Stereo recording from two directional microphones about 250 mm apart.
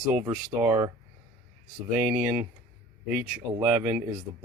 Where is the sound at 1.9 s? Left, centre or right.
Centre.